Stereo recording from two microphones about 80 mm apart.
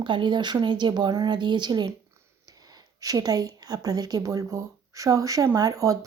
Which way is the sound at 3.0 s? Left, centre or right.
Right.